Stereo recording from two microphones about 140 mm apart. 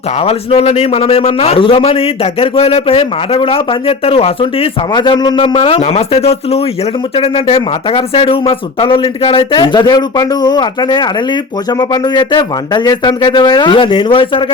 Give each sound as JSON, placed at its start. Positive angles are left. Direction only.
{"t": 0.3, "sound": "a man's voice", "side_deg": 45}